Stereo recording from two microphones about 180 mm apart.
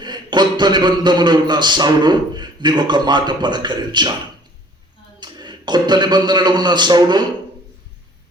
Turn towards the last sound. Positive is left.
turn(degrees=-25)  # may be behind; listen again after turning